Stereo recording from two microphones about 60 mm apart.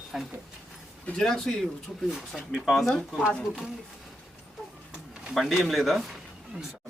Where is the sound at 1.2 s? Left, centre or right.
Centre.